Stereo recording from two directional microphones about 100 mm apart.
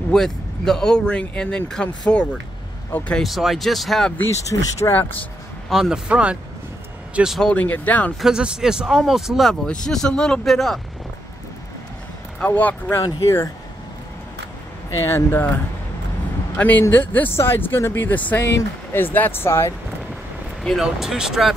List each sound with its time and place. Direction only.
0.1 s speech: 5° left (ahead or behind)
3.2 s speech: centre (ahead or behind)
4.5 s speech: 30° left (ahead or behind)
5.7 s speech: 5° right (ahead or behind)
7.5 s speech: 15° left (ahead or behind)
8.2 s speech: 10° right (ahead or behind)
9.5 s speech: 5° left (ahead or behind)
12.4 s speech: 15° left (ahead or behind)
13.0 s speech: 30° left (ahead or behind)
14.9 s speech: 25° left (ahead or behind)
20.8 s speech: 5° right (ahead or behind)